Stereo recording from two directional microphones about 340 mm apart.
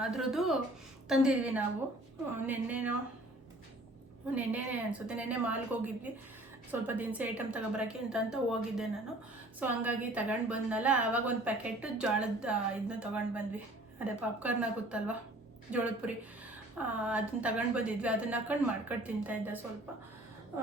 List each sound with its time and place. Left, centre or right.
0.0 s a woman's voice: centre
4.4 s a woman's voice: centre